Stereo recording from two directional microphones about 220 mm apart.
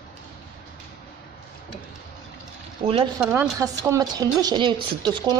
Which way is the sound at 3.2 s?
10° right (ahead or behind).